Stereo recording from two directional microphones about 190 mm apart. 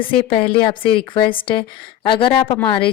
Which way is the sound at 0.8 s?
25° left (ahead or behind).